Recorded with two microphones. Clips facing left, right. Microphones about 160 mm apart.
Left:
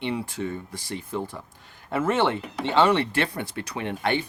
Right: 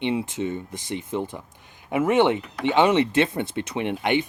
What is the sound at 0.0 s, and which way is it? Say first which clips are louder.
Speech: right 4 dB; 20° right (ahead or behind).